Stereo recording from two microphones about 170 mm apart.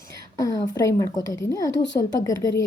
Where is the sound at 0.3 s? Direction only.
20° left (ahead or behind).